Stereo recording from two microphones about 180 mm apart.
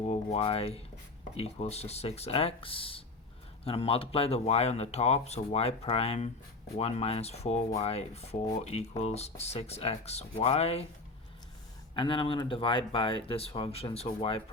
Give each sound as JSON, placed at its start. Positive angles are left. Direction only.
{"t": 0.1, "sound": "speech", "side_deg": 35}
{"t": 11.9, "sound": "speech", "side_deg": 30}